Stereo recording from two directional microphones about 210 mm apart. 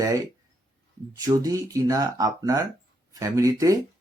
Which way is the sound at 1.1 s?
15° right (ahead or behind).